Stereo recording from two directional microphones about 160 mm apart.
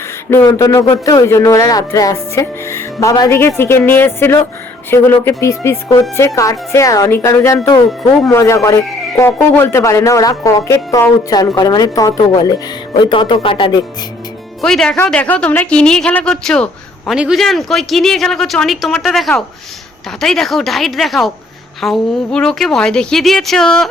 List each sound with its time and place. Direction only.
0.3 s a man's voice: 15° left (ahead or behind)
14.6 s speech: 5° left (ahead or behind)